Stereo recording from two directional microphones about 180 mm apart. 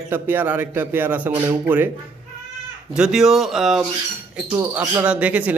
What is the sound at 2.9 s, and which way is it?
Speech, 5° right (ahead or behind).